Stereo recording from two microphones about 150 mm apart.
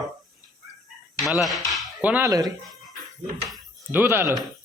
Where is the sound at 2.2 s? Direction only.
25° right (ahead or behind).